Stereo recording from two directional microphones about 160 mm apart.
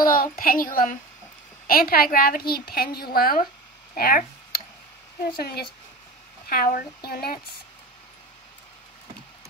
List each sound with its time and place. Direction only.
0.0 s a woman's voice: 60° left (ahead or behind)
3.9 s a sound: 65° left (ahead or behind)
5.4 s a woman's voice: 75° left (ahead or behind)
6.5 s a woman's voice: 65° left (ahead or behind)